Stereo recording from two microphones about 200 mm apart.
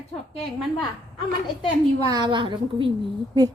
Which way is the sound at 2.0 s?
20° right (ahead or behind).